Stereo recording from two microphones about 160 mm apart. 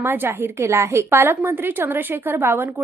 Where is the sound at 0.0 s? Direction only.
15° right (ahead or behind).